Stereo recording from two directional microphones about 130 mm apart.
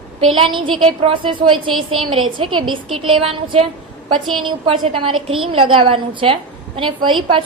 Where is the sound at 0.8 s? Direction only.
40° right (ahead or behind).